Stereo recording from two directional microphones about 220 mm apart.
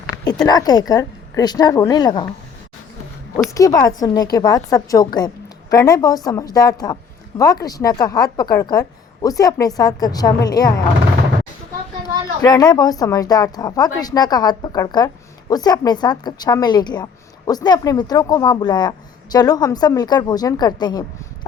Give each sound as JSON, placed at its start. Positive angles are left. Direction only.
{"t": 0.4, "sound": "speech", "side_deg": 15}
{"t": 3.5, "sound": "speech", "side_deg": 15}
{"t": 12.4, "sound": "speech", "side_deg": 15}